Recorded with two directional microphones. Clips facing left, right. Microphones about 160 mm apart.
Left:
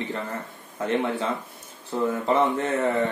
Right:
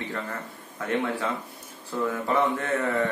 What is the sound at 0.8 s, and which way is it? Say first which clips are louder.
Speech: left 3 dB; 25° left (ahead or behind).